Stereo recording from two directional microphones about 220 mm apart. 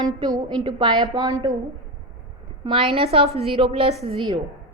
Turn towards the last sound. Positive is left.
turn(degrees=-25)  # may be behind; listen again after turning